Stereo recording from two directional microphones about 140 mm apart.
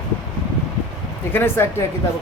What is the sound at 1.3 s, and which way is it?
Speech, 15° left (ahead or behind).